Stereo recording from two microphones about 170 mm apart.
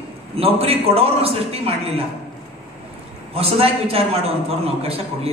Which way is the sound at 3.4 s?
35° right (ahead or behind).